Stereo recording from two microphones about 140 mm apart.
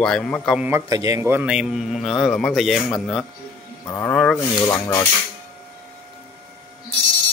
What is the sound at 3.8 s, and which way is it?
Speech, 15° left (ahead or behind).